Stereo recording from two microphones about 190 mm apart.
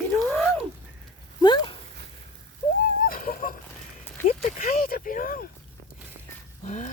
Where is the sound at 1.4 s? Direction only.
25° left (ahead or behind).